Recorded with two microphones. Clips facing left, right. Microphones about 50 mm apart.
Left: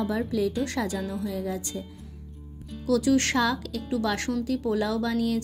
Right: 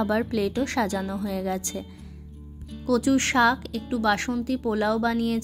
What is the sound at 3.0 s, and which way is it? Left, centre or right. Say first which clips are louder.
Speech: right 1 dB; right.